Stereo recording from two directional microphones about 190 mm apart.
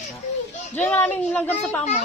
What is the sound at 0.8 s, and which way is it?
A woman's voice, 10° left (ahead or behind).